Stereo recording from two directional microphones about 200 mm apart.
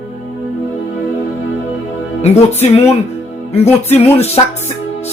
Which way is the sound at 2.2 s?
30° left (ahead or behind).